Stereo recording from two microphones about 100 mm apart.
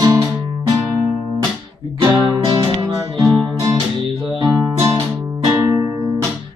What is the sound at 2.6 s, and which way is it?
Music, 35° right (ahead or behind).